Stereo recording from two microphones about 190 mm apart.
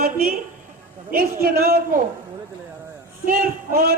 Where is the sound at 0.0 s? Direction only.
50° right (ahead or behind).